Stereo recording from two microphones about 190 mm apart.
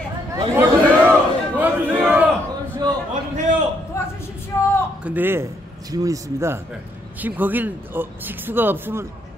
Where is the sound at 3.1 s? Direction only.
40° right (ahead or behind).